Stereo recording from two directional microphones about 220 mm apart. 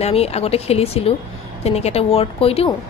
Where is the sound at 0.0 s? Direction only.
30° left (ahead or behind).